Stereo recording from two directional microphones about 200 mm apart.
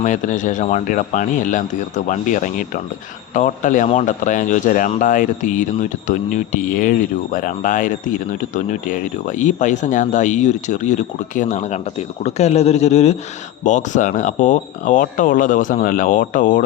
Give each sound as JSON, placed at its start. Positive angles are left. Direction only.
{"t": 0.0, "sound": "speech", "side_deg": 40}